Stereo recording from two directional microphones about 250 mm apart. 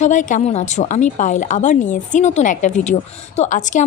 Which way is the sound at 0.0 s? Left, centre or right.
Left.